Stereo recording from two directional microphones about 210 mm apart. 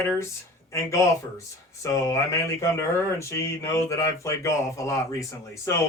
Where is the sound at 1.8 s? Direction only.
15° left (ahead or behind).